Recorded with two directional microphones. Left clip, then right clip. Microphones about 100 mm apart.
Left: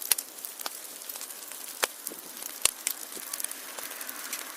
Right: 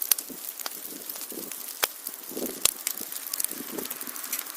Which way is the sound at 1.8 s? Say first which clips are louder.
Right 1 dB; 35° right (ahead or behind).